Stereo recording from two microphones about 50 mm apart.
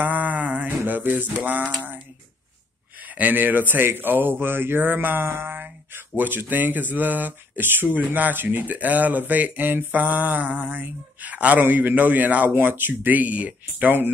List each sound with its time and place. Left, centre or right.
0.0 s mantra: right
0.7 s music: right
3.2 s speech: right